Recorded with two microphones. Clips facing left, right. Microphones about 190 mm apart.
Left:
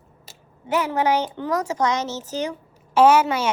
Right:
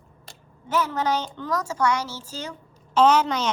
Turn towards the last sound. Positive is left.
turn(degrees=10)  # may be behind; listen again after turning